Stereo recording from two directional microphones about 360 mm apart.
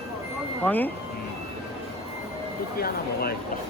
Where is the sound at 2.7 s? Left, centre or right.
Left.